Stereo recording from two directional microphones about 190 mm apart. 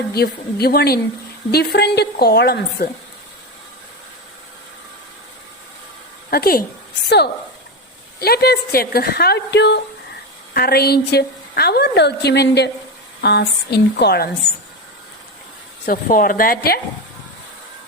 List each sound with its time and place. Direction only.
0.1 s a woman's voice: 55° left (ahead or behind)
6.3 s a woman's voice: 50° left (ahead or behind)
8.2 s a woman's voice: 55° left (ahead or behind)
15.9 s a woman's voice: 45° left (ahead or behind)